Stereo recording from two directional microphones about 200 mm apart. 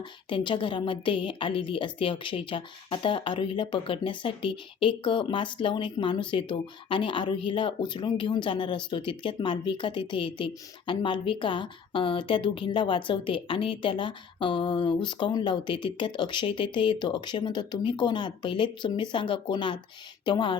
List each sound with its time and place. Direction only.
0.3 s a woman's voice: 25° left (ahead or behind)